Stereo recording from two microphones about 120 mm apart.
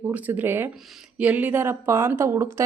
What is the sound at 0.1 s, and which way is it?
Speech, 15° right (ahead or behind).